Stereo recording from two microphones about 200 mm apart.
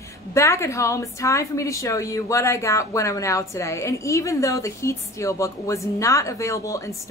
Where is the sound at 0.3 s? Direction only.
15° left (ahead or behind).